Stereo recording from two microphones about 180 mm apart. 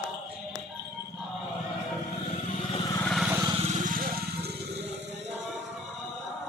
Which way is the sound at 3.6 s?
50° right (ahead or behind).